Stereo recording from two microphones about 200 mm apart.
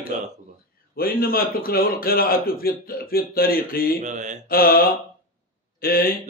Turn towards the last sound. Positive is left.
turn(degrees=45)  # may be behind; listen again after turning